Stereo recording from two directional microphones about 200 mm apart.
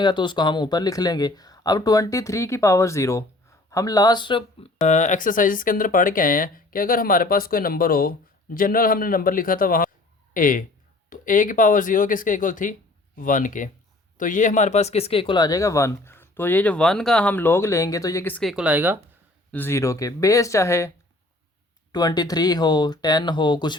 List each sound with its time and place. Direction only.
0.0 s speech: 25° left (ahead or behind); by 18.9 s 10° right (ahead or behind)
19.5 s speech: 10° left (ahead or behind)
21.9 s speech: 20° left (ahead or behind)